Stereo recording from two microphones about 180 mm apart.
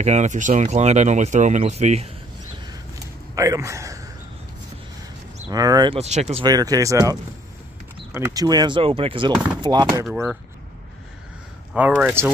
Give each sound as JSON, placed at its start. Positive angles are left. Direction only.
{"t": 0.0, "sound": "speech", "side_deg": -40}
{"t": 3.3, "sound": "a man's voice", "side_deg": -15}
{"t": 5.5, "sound": "speech", "side_deg": -20}
{"t": 5.9, "sound": "speech", "side_deg": -40}
{"t": 6.4, "sound": "speech", "side_deg": -20}
{"t": 11.7, "sound": "a man's voice", "side_deg": -10}